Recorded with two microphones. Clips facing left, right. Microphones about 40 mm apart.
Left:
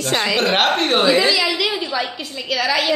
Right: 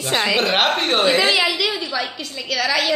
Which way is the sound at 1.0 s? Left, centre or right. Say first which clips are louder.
Even; right.